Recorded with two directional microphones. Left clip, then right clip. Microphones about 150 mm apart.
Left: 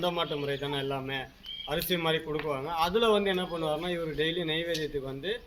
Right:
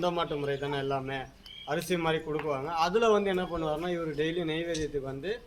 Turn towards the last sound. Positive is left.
turn(degrees=-15)  # may be behind; listen again after turning